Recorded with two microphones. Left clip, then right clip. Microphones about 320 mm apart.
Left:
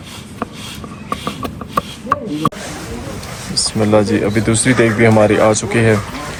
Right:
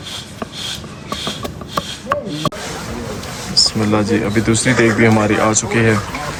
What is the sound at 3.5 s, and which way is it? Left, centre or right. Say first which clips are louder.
Speech: left 1 dB; centre.